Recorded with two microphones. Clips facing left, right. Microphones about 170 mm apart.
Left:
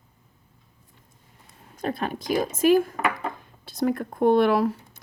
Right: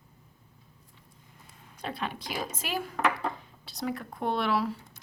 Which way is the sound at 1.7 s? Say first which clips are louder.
Left 7 dB; 45° left (ahead or behind).